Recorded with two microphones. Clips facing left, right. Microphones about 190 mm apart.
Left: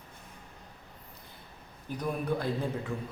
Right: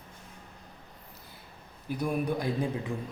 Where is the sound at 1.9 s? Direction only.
10° right (ahead or behind).